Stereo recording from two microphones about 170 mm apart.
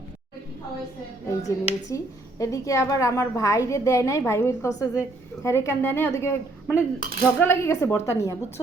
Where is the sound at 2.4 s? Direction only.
20° left (ahead or behind).